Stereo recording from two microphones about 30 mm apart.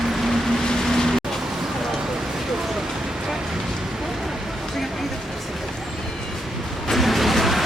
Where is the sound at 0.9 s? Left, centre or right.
Centre.